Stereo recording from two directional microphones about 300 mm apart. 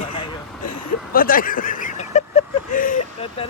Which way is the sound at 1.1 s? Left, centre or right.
Left.